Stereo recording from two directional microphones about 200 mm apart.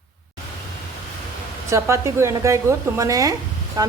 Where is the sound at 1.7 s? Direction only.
15° right (ahead or behind).